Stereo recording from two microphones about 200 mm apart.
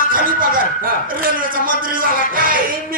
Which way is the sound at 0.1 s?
45° right (ahead or behind).